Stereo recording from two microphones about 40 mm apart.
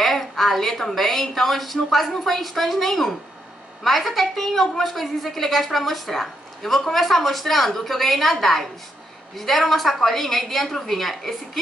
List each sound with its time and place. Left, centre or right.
0.0 s a woman's voice: centre